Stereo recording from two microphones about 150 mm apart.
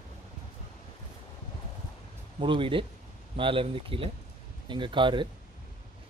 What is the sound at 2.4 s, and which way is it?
Speech, 35° right (ahead or behind).